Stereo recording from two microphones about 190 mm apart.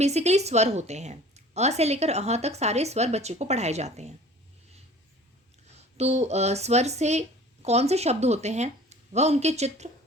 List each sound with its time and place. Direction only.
0.0 s a woman's voice: 35° right (ahead or behind)
5.7 s speech: 35° right (ahead or behind)